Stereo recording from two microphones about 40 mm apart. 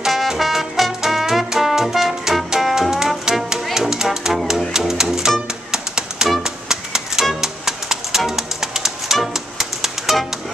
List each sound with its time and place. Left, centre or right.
0.0 s music: centre